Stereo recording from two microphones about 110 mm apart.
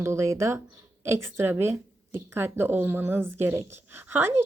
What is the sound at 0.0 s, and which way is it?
A woman's voice, 25° right (ahead or behind).